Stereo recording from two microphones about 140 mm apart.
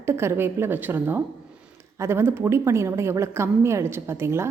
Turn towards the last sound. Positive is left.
turn(degrees=-20)  # may be behind; listen again after turning